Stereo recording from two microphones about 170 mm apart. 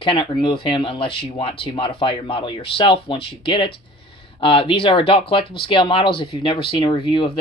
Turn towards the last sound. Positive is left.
turn(degrees=30)  # may be behind; listen again after turning